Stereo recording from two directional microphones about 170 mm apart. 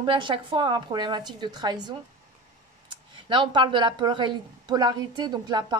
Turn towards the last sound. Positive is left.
turn(degrees=-25)  # may be behind; listen again after turning